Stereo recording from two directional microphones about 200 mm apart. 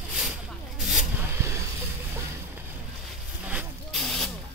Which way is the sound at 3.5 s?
5° right (ahead or behind).